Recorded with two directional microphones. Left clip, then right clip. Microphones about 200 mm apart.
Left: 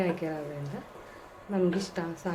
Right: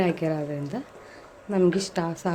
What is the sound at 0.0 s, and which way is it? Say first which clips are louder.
Speech: right 6 dB; 40° right (ahead or behind).